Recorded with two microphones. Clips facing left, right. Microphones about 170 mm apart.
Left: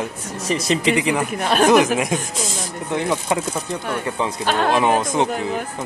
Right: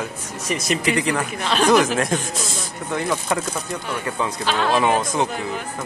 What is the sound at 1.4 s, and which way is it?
Speech, 50° left (ahead or behind).